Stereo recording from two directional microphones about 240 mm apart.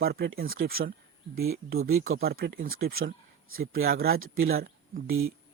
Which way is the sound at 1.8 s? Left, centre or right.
Right.